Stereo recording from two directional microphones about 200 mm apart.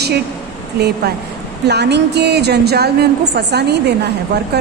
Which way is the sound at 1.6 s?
55° right (ahead or behind).